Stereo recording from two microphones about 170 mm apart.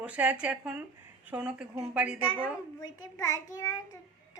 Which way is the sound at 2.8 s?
20° left (ahead or behind).